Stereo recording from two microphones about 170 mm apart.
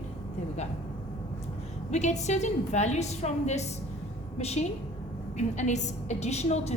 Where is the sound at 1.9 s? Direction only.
45° left (ahead or behind).